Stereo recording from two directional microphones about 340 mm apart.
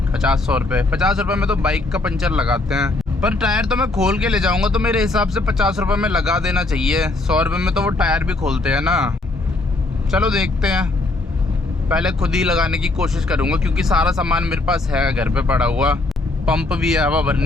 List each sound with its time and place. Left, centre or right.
0.1 s speech: centre
11.9 s speech: centre